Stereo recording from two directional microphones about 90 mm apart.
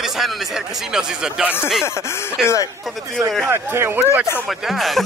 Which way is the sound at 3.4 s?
30° right (ahead or behind).